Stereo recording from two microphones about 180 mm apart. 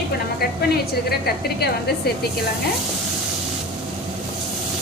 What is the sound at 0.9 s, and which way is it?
Speech, 60° left (ahead or behind).